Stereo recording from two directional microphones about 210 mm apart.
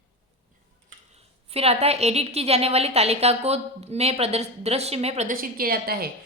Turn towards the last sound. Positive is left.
turn(degrees=-45)  # may be behind; listen again after turning